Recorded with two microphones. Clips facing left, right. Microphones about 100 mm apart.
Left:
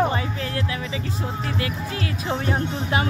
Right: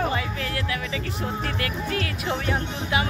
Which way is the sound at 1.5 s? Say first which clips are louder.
Even; 25° left (ahead or behind).